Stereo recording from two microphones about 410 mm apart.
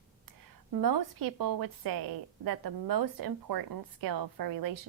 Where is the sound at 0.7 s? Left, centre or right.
Right.